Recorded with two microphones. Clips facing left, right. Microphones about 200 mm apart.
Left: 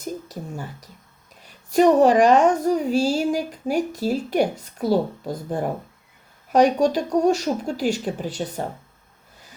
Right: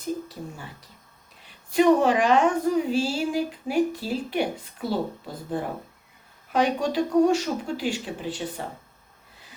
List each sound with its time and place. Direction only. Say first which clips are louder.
0.0 s a woman's voice: even; 40° left (ahead or behind)